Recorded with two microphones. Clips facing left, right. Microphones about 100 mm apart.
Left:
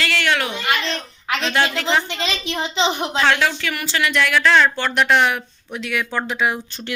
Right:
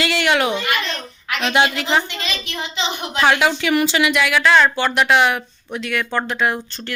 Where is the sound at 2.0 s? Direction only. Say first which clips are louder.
Left 3 dB; 25° left (ahead or behind).